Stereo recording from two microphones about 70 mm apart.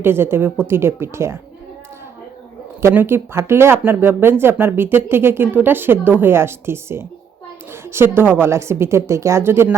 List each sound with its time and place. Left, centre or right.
0.0 s speech: right
2.9 s speech: right